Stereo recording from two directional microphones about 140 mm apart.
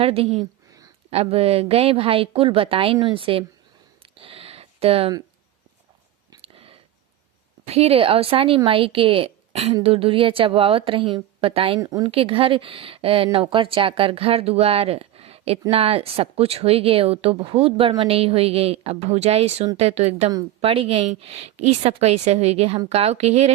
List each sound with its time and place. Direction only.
0.0 s speech: 45° right (ahead or behind)
4.0 s a sound: 40° right (ahead or behind)
6.4 s a sound: 40° right (ahead or behind)
7.7 s speech: 45° right (ahead or behind)
11.8 s speech: 25° right (ahead or behind)
12.1 s speech: 40° right (ahead or behind)